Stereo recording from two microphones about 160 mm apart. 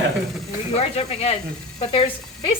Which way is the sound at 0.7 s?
40° left (ahead or behind).